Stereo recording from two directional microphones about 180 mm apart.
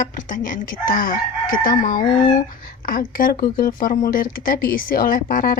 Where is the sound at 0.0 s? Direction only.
45° left (ahead or behind).